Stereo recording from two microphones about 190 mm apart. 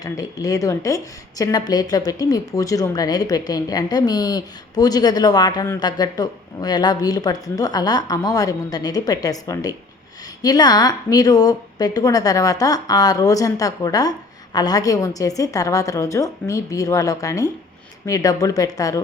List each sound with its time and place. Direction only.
0.0 s a woman's voice: 20° left (ahead or behind)